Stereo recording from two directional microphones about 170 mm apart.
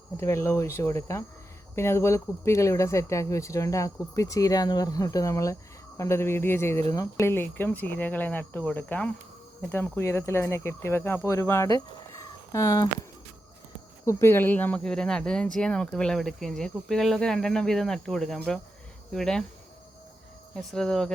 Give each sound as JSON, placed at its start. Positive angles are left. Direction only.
{"t": 0.2, "sound": "speech", "side_deg": 15}
{"t": 14.0, "sound": "speech", "side_deg": 15}
{"t": 20.6, "sound": "speech", "side_deg": 5}